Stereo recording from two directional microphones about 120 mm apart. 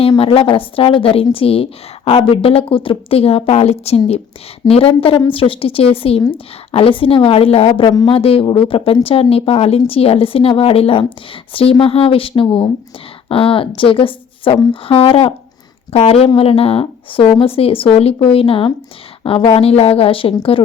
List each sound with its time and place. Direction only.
0.2 s speech: 45° left (ahead or behind)